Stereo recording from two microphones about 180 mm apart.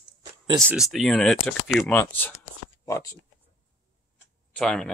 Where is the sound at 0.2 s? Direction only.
25° right (ahead or behind).